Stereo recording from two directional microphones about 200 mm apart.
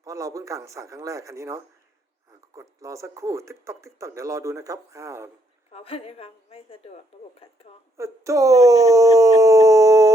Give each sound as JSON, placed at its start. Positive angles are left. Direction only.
{"t": 0.0, "sound": "speech", "side_deg": -15}
{"t": 5.7, "sound": "a woman's voice", "side_deg": 30}
{"t": 7.9, "sound": "speech", "side_deg": -15}